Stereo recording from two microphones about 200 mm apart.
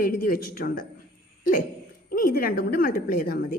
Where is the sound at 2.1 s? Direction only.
45° left (ahead or behind).